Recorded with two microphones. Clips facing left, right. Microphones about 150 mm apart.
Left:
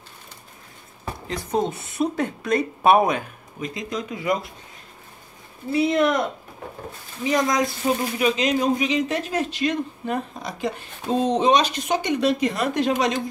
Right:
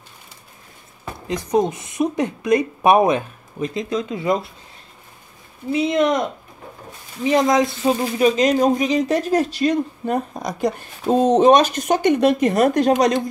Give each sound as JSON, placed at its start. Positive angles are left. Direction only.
{"t": 1.2, "sound": "speech", "side_deg": -15}
{"t": 5.7, "sound": "speech", "side_deg": -20}
{"t": 7.2, "sound": "speech", "side_deg": -25}
{"t": 8.4, "sound": "speech", "side_deg": -45}